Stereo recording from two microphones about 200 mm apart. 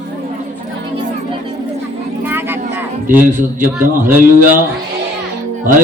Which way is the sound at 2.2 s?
10° right (ahead or behind).